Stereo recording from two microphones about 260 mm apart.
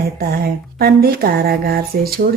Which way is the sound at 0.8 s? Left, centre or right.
Right.